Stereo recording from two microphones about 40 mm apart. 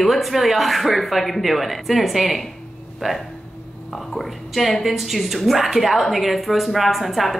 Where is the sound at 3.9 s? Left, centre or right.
Centre.